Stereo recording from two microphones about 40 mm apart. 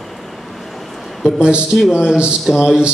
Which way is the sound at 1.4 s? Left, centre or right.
Right.